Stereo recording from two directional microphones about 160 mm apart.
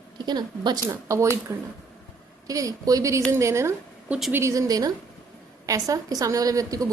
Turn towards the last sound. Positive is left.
turn(degrees=-20)  # may be behind; listen again after turning